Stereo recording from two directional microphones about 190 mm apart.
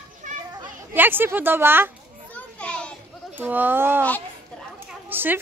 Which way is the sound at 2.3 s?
5° left (ahead or behind).